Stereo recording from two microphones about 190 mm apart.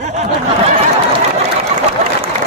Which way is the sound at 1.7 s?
30° right (ahead or behind).